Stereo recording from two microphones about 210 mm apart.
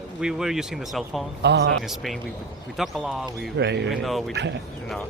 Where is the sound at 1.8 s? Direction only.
Centre (ahead or behind).